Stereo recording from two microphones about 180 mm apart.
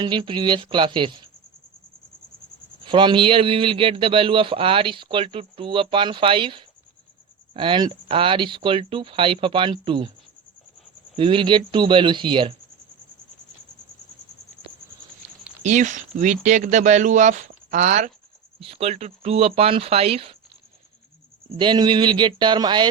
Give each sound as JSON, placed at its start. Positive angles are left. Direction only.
{"t": 0.0, "sound": "a man's voice", "side_deg": -25}
{"t": 2.8, "sound": "a man's voice", "side_deg": -25}
{"t": 11.2, "sound": "a man's voice", "side_deg": -30}
{"t": 15.6, "sound": "speech", "side_deg": -45}
{"t": 21.6, "sound": "a man's voice", "side_deg": -25}